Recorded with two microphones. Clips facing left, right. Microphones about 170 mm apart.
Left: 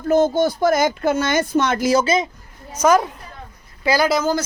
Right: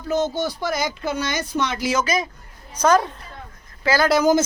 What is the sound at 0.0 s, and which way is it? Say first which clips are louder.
Speech: left 6 dB; 50° left (ahead or behind).